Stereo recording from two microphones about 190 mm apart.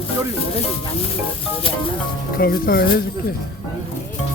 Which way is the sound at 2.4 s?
50° left (ahead or behind).